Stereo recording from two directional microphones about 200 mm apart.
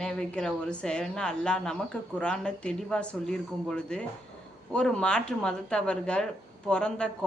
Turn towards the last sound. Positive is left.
turn(degrees=5)  # may be behind; listen again after turning